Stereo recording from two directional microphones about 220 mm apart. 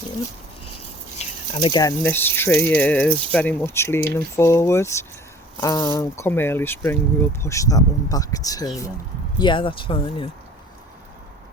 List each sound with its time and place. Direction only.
1.2 s speech: 20° left (ahead or behind)